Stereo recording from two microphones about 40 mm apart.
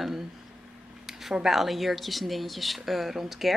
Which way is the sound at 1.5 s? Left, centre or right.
Centre.